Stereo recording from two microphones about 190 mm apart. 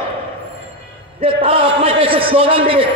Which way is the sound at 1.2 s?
30° right (ahead or behind).